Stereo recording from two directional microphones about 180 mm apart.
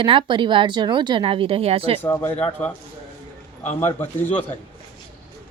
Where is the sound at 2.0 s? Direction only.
20° left (ahead or behind).